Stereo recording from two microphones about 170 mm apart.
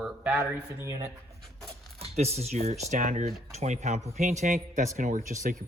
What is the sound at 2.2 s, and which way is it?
A man's voice, 40° right (ahead or behind).